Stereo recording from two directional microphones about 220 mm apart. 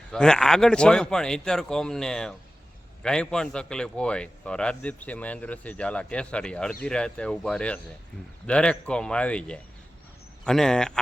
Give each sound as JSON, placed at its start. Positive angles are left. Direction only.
{"t": 0.1, "sound": "a man's voice", "side_deg": 5}